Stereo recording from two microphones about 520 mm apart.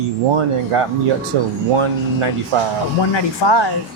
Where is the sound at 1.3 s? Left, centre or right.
Right.